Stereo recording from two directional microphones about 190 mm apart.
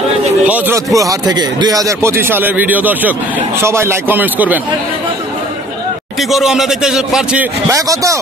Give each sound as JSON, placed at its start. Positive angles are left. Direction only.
{"t": 0.5, "sound": "speech", "side_deg": -15}
{"t": 6.3, "sound": "a man's voice", "side_deg": 0}
{"t": 7.7, "sound": "speech", "side_deg": -15}